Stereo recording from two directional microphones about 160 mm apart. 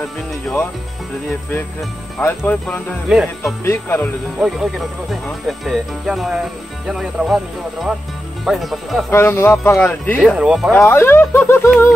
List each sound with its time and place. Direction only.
0.0 s speech: 5° left (ahead or behind)
2.1 s speech: 10° left (ahead or behind)
3.1 s speech: 5° right (ahead or behind)
3.6 s speech: 15° left (ahead or behind)
4.4 s speech: centre (ahead or behind)
8.5 s speech: centre (ahead or behind)
9.1 s speech: 15° left (ahead or behind)
10.3 s speech: 5° right (ahead or behind)
10.7 s speech: 15° left (ahead or behind)